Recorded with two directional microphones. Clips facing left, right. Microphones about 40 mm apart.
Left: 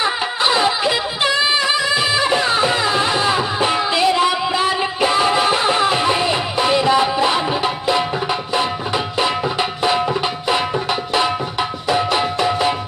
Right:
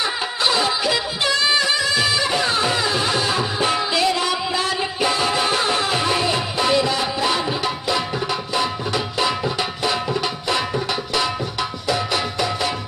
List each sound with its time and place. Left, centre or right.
0.0 s music: centre
11.9 s music: left